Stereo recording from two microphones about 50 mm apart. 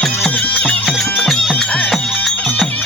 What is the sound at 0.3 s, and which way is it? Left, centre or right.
Music, left.